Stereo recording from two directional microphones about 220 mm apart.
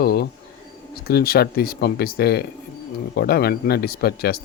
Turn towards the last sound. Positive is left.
turn(degrees=45)  # may be behind; listen again after turning